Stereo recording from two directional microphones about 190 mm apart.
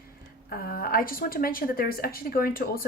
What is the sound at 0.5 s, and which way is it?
Speech, 50° left (ahead or behind).